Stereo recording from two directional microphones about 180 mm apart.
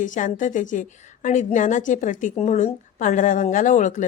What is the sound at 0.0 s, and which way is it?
A woman's voice, 45° left (ahead or behind).